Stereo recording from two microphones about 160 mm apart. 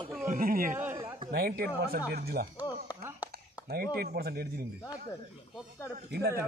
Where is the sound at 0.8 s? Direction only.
15° right (ahead or behind).